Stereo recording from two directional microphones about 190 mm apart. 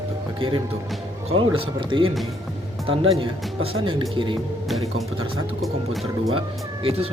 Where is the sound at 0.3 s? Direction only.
25° right (ahead or behind).